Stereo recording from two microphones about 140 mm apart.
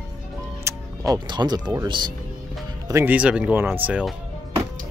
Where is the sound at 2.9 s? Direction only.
15° right (ahead or behind).